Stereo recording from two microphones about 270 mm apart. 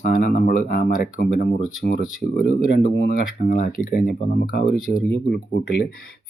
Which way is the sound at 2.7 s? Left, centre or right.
Left.